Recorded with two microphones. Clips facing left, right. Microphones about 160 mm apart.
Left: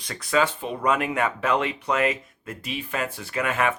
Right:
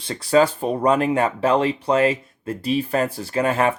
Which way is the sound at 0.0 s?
30° right (ahead or behind).